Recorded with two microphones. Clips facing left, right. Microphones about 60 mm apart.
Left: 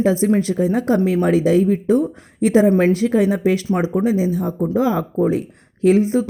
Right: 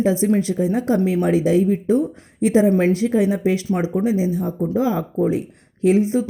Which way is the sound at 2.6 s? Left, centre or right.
Left.